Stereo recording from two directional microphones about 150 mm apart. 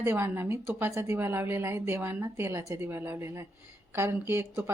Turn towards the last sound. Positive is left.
turn(degrees=-15)  # may be behind; listen again after turning